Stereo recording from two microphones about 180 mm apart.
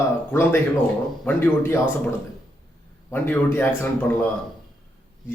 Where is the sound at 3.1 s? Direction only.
10° left (ahead or behind).